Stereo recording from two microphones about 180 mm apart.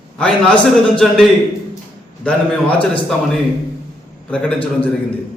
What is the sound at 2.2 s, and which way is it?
Speech, 5° left (ahead or behind).